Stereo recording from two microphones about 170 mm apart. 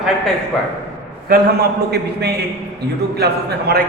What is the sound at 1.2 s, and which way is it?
A man's voice, 65° right (ahead or behind).